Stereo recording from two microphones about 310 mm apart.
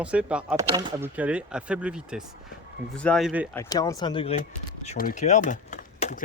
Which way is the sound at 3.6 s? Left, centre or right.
Centre.